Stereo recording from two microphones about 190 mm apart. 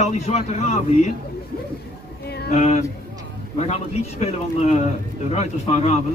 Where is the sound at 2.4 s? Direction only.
35° left (ahead or behind).